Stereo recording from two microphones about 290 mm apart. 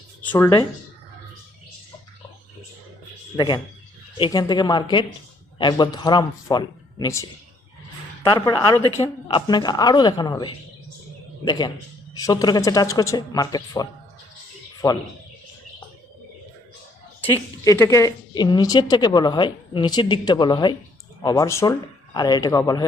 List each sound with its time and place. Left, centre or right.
0.2 s speech: centre
3.3 s a woman's voice: centre
14.8 s a woman's voice: centre
17.6 s a woman's voice: centre